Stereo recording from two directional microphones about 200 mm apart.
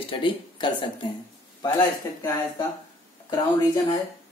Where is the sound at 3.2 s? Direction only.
20° left (ahead or behind).